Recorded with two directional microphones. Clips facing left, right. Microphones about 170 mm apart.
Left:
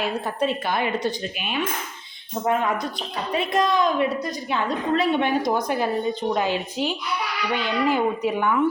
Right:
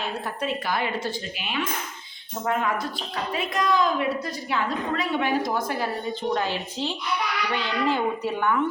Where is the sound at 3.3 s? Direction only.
25° left (ahead or behind).